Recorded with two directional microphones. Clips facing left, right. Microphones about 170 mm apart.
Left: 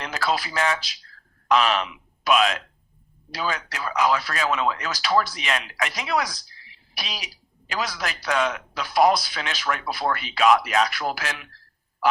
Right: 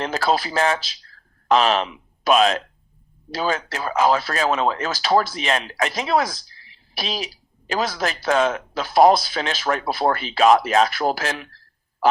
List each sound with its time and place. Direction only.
0.0 s speech: 30° right (ahead or behind)